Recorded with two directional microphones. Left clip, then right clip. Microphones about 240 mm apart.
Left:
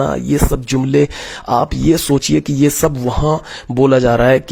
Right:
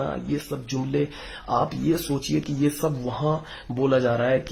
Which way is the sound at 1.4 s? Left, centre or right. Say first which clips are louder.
Left 9 dB; left.